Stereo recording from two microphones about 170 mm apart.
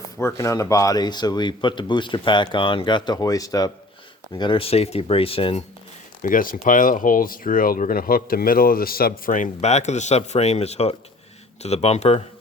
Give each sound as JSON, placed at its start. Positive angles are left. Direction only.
{"t": 0.2, "sound": "speech", "side_deg": 15}
{"t": 6.2, "sound": "speech", "side_deg": 55}